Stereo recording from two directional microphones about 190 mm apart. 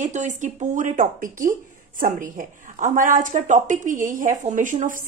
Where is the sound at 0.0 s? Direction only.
40° right (ahead or behind).